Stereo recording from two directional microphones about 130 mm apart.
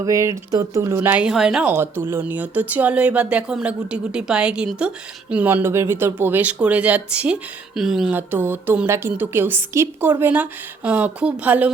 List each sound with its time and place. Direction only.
0.0 s speech: 25° right (ahead or behind); by 1.7 s 5° right (ahead or behind)
1.7 s a woman's voice: 15° right (ahead or behind)
8.1 s a woman's voice: 15° right (ahead or behind)